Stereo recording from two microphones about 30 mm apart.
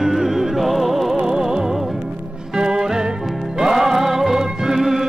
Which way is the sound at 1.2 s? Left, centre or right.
Right.